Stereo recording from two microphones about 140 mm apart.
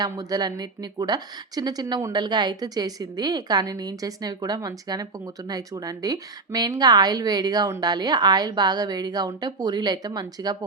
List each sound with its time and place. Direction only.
0.0 s a woman's voice: 25° right (ahead or behind)